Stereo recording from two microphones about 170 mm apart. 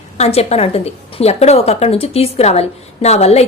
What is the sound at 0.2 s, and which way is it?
A woman's voice, 40° left (ahead or behind).